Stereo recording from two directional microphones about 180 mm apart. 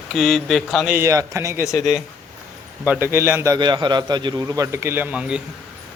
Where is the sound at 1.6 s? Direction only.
15° left (ahead or behind).